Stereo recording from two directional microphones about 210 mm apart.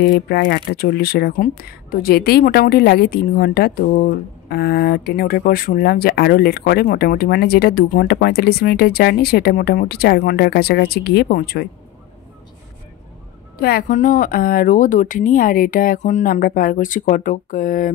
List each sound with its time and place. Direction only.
0.0 s a woman's voice: 50° left (ahead or behind)
13.6 s a woman's voice: 45° left (ahead or behind)